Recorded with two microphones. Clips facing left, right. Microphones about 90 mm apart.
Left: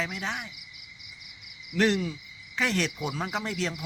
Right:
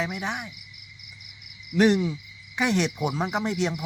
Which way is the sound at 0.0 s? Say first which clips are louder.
Right 3 dB; 15° right (ahead or behind).